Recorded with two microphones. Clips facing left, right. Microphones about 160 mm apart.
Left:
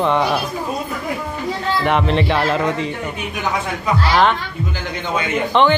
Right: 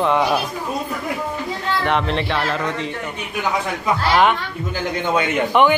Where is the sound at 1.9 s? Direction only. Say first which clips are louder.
Left 4 dB; 5° left (ahead or behind).